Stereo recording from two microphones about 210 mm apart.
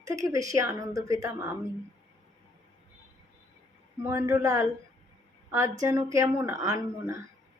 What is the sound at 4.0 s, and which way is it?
Speech, 15° right (ahead or behind).